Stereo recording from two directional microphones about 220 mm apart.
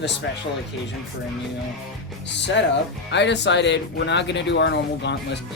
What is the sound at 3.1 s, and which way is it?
Speech, 50° left (ahead or behind).